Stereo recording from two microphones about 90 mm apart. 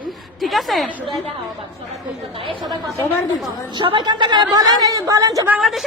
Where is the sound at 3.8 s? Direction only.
60° right (ahead or behind); by 5.5 s 40° right (ahead or behind).